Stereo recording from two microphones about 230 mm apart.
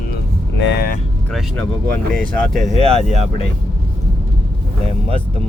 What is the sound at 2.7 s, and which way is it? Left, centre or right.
Speech, right.